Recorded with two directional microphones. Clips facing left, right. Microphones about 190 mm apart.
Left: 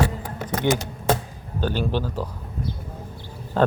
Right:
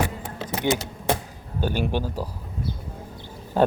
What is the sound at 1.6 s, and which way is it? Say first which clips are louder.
Speech: left 1 dB; 10° right (ahead or behind).